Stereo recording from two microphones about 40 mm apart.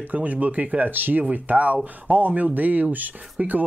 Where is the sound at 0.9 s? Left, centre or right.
Right.